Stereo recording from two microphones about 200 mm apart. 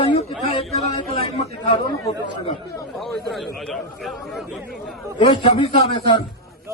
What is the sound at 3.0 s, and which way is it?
A man's voice, centre (ahead or behind).